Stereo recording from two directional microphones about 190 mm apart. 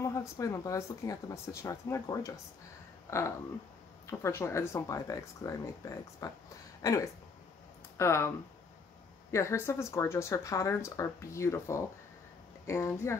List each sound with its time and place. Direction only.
0.1 s speech: 15° left (ahead or behind)
9.3 s speech: 15° left (ahead or behind)